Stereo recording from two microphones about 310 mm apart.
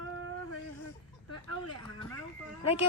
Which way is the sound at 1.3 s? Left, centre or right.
Left.